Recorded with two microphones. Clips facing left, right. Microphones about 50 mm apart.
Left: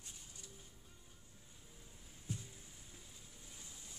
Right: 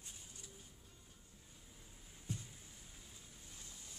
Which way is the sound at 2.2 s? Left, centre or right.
Centre.